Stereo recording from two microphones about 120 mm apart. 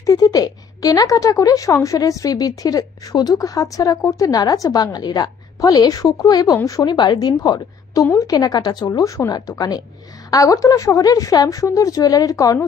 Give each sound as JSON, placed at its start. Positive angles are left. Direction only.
{"t": 0.0, "sound": "a woman's voice", "side_deg": 30}